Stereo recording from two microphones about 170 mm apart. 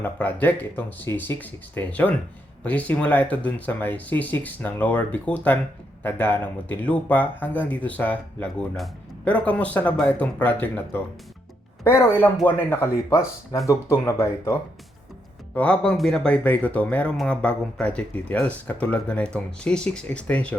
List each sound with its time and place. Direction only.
0.0 s speech: 10° left (ahead or behind)